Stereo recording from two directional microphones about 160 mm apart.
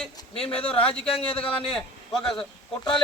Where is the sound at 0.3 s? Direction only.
35° left (ahead or behind).